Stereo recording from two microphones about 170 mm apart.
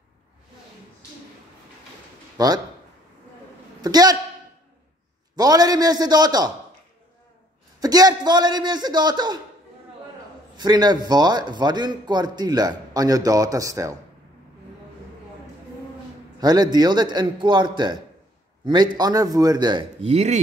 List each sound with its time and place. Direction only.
2.3 s a man's voice: 25° right (ahead or behind)
3.8 s a man's voice: 25° right (ahead or behind)
5.3 s a man's voice: 25° right (ahead or behind)
7.8 s a man's voice: 20° right (ahead or behind)
10.6 s a man's voice: 25° right (ahead or behind)
16.3 s a man's voice: 25° right (ahead or behind)